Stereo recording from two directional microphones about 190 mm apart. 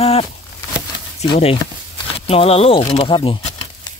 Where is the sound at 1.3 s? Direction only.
30° left (ahead or behind).